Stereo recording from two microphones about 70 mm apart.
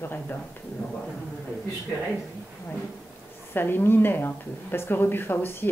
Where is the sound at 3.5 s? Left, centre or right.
Left.